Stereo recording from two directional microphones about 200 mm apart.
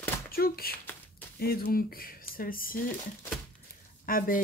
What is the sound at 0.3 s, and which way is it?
A woman's voice, 50° left (ahead or behind).